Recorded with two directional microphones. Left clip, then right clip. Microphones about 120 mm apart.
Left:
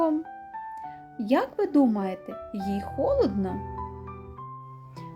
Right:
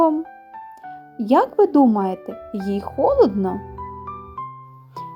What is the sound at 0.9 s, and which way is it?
Speech, 25° right (ahead or behind).